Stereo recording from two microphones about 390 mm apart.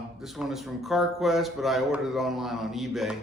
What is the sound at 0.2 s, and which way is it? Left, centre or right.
Speech, centre.